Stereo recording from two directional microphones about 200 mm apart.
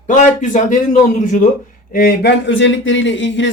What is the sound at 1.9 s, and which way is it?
Speech, 50° left (ahead or behind).